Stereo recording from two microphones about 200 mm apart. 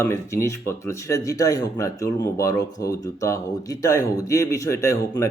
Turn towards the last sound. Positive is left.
turn(degrees=15)  # may be behind; listen again after turning